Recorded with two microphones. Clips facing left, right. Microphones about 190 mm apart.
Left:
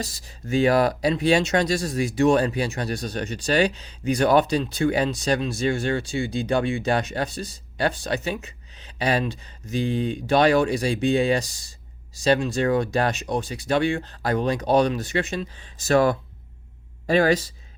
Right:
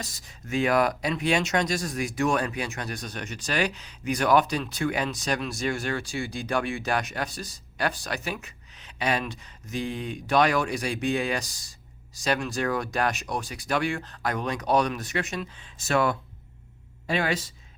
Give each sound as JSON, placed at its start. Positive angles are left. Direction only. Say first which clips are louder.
{"t": 0.0, "sound": "speech", "louder": "left 7 dB", "side_deg": 30}